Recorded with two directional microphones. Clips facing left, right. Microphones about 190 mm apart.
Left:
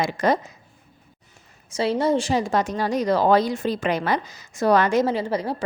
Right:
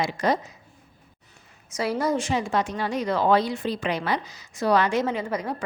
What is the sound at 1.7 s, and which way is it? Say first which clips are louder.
A woman's voice: left 4 dB; 25° left (ahead or behind).